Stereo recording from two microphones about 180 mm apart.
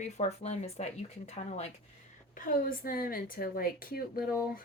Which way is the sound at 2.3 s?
50° left (ahead or behind).